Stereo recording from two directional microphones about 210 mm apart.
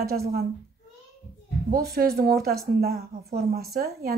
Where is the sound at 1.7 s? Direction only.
45° right (ahead or behind).